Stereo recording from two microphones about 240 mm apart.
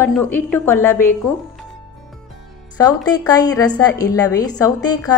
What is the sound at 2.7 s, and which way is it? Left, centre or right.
A woman's voice, centre.